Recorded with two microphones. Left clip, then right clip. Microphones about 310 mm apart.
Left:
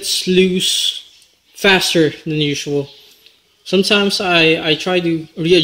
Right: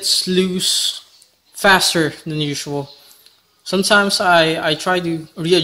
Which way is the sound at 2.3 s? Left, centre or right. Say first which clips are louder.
Left 5 dB; centre.